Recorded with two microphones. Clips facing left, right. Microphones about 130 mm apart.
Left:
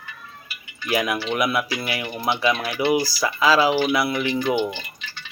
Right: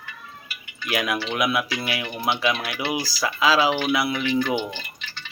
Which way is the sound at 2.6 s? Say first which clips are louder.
Left 6 dB; 15° left (ahead or behind).